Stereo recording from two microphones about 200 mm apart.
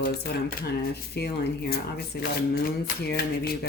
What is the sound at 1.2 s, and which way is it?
Speech, 55° left (ahead or behind).